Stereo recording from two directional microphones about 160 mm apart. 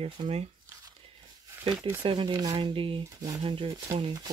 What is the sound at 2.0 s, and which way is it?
Speech, 30° right (ahead or behind).